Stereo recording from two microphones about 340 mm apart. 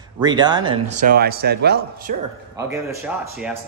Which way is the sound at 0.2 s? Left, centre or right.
Centre.